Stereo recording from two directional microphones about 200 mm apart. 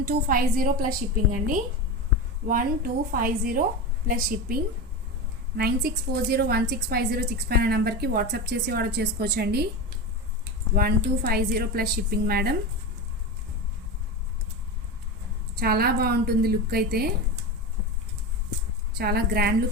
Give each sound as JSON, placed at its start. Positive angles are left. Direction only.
{"t": 0.0, "sound": "a woman's voice", "side_deg": -45}
{"t": 10.8, "sound": "a woman's voice", "side_deg": -50}
{"t": 15.5, "sound": "a woman's voice", "side_deg": -50}
{"t": 18.9, "sound": "a woman's voice", "side_deg": -50}